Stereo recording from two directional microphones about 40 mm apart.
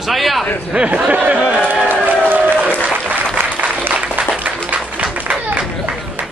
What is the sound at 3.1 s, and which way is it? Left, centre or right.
Applause, right.